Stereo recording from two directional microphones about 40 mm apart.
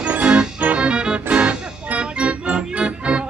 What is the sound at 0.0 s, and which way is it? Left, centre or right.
Music, right.